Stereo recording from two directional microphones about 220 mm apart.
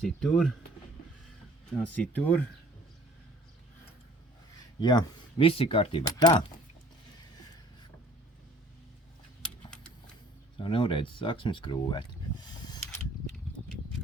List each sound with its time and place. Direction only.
0.0 s speech: 5° left (ahead or behind)
1.8 s speech: 5° left (ahead or behind)
4.8 s speech: 20° left (ahead or behind)
9.4 s a sound: 5° left (ahead or behind)
10.6 s speech: 25° left (ahead or behind)